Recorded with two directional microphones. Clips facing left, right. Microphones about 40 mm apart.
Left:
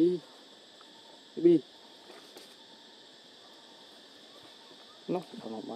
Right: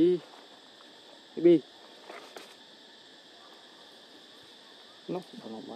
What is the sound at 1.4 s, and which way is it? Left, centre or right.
Speech, right.